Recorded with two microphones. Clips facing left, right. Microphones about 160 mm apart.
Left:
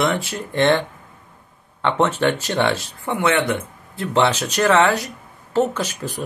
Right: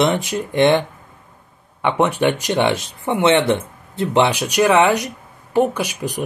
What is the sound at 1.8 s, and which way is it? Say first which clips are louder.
Speech: right 2 dB; 15° right (ahead or behind).